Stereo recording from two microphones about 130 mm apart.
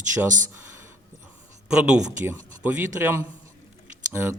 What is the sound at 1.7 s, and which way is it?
Speech, 5° right (ahead or behind).